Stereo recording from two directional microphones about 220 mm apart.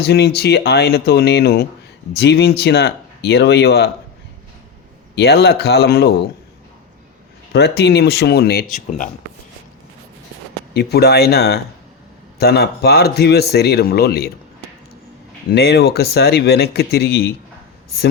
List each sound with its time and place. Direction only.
0.0 s speech: 45° left (ahead or behind)
5.1 s speech: 45° left (ahead or behind)
7.5 s speech: 45° left (ahead or behind)
10.8 s speech: 45° left (ahead or behind)
15.4 s speech: 45° left (ahead or behind)